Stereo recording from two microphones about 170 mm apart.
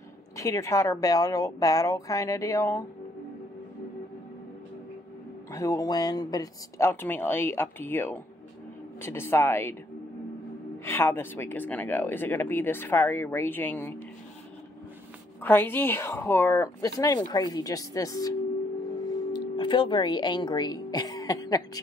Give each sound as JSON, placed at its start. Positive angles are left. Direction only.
{"t": 0.4, "sound": "speech", "side_deg": 20}
{"t": 5.5, "sound": "speech", "side_deg": 20}
{"t": 10.9, "sound": "speech", "side_deg": 15}
{"t": 15.4, "sound": "speech", "side_deg": 10}